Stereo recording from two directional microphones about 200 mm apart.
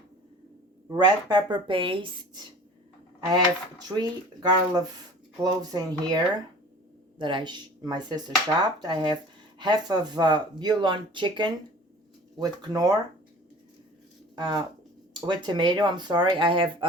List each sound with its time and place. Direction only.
0.9 s speech: 20° right (ahead or behind)
14.3 s speech: 25° right (ahead or behind)